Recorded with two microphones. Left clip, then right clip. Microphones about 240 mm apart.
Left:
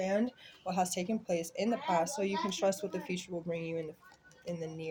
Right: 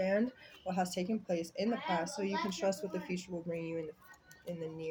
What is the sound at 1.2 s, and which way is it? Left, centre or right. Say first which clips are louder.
Speech: left 3 dB; left.